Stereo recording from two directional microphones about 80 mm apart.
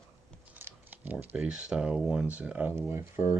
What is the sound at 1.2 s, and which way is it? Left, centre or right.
Speech, centre.